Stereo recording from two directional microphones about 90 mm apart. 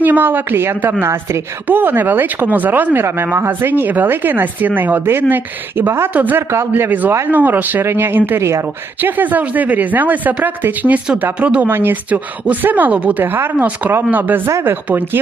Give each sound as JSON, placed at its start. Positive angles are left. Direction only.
{"t": 0.0, "sound": "speech", "side_deg": -20}